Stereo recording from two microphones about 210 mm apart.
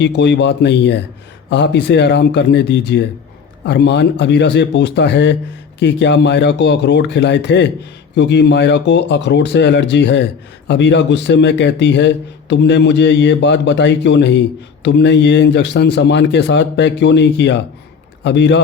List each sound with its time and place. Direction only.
0.0 s a man's voice: 55° left (ahead or behind)